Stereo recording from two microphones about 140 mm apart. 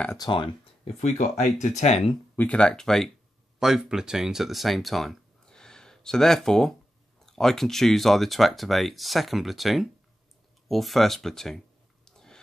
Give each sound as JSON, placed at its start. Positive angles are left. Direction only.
{"t": 0.2, "sound": "speech", "side_deg": 35}
{"t": 1.0, "sound": "speech", "side_deg": 60}
{"t": 2.3, "sound": "speech", "side_deg": 10}
{"t": 10.7, "sound": "a sound", "side_deg": 0}